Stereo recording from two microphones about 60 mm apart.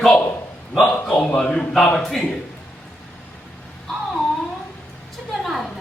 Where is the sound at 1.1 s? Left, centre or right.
Centre.